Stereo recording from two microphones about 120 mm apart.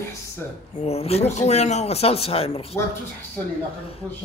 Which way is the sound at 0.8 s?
60° left (ahead or behind).